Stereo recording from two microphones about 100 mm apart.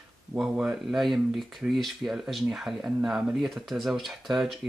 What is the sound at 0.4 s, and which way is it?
Speech, 10° right (ahead or behind).